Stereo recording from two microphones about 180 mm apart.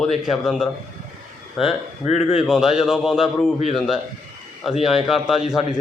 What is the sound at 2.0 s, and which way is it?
Speech, 35° left (ahead or behind).